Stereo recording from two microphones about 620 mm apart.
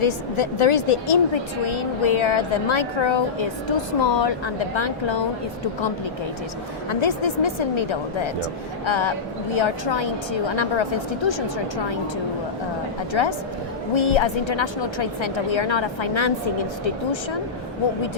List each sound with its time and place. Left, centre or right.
0.0 s a woman's voice: left
7.0 s a woman's voice: left
11.3 s a woman's voice: left
13.9 s a woman's voice: left